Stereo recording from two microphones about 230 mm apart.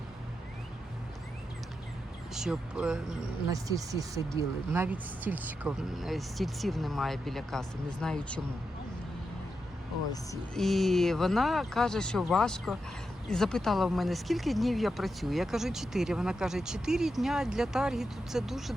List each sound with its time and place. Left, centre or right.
2.3 s speech: centre
3.5 s speech: centre
10.5 s speech: centre